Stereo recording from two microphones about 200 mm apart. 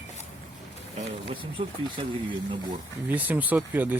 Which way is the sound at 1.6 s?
30° right (ahead or behind).